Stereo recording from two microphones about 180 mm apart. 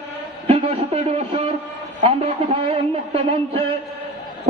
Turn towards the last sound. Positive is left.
turn(degrees=-30)  # may be behind; listen again after turning